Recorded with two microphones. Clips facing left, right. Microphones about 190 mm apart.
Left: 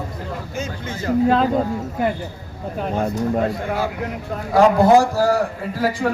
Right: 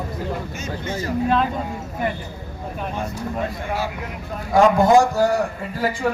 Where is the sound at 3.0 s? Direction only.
60° left (ahead or behind).